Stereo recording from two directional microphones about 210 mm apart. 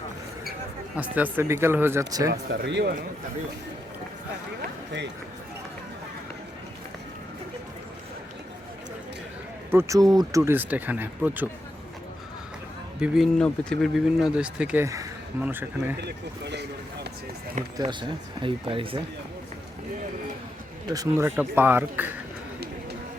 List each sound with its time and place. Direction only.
0.9 s speech: 5° right (ahead or behind)
2.3 s speech: 55° right (ahead or behind)
9.7 s speech: 15° right (ahead or behind)
13.0 s speech: centre (ahead or behind)
16.0 s speech: 55° right (ahead or behind)
18.4 s speech: 25° right (ahead or behind)
20.8 s speech: 15° right (ahead or behind)